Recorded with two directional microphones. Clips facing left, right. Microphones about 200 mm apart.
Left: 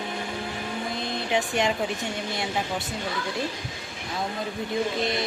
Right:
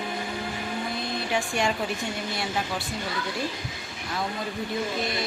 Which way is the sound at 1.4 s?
20° left (ahead or behind).